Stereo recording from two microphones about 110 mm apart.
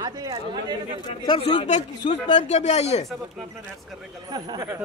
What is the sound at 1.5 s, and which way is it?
Speech, 90° left.